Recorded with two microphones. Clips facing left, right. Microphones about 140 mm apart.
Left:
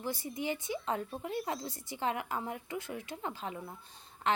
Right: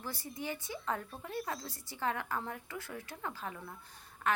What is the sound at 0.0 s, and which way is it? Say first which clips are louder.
A woman's voice: left 5 dB; 20° left (ahead or behind).